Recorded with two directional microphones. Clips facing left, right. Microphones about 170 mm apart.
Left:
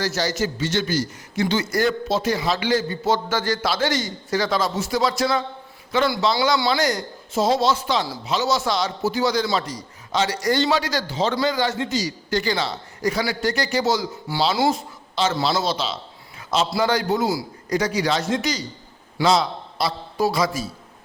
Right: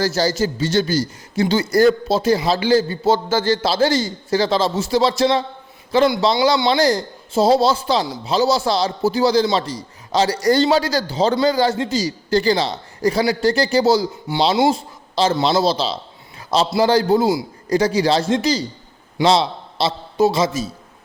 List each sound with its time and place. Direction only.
0.0 s a man's voice: 30° right (ahead or behind)